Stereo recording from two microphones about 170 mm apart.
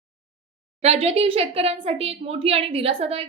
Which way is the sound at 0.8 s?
40° right (ahead or behind).